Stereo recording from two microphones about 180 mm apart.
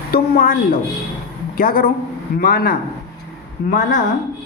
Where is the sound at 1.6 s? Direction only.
50° left (ahead or behind).